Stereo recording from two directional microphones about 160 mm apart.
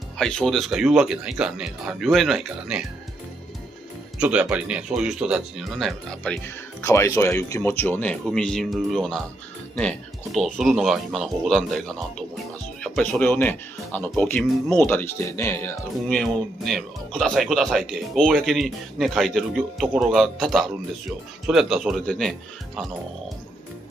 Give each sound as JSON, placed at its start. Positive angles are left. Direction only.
{"t": 0.2, "sound": "speech", "side_deg": 5}
{"t": 4.2, "sound": "speech", "side_deg": -5}
{"t": 6.8, "sound": "speech", "side_deg": 20}
{"t": 16.1, "sound": "speech", "side_deg": 0}